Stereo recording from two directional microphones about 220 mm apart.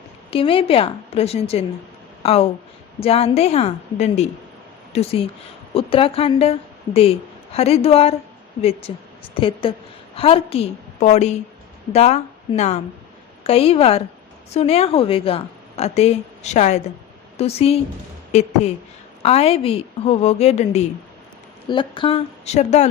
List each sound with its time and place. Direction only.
0.3 s a woman's voice: 25° left (ahead or behind)
9.4 s a woman's voice: 25° left (ahead or behind)